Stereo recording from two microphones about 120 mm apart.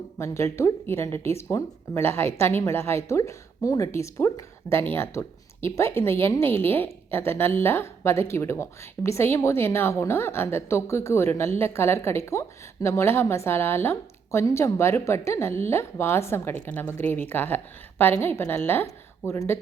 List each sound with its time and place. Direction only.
0.2 s speech: 25° left (ahead or behind)